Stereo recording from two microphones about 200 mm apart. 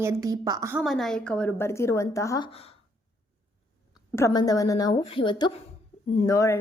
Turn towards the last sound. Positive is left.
turn(degrees=15)  # may be behind; listen again after turning